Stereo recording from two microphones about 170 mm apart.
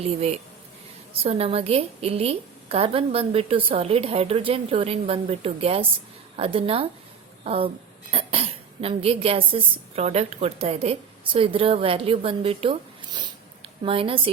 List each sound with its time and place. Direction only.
0.0 s a woman's voice: 40° right (ahead or behind)
13.8 s a woman's voice: 35° right (ahead or behind)